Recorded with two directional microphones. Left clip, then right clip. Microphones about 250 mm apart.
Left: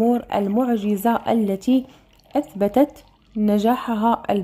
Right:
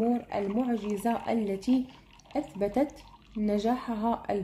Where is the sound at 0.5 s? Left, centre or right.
Left.